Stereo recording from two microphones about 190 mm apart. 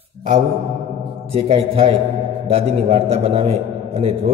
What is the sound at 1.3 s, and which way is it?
A man's voice, 35° right (ahead or behind).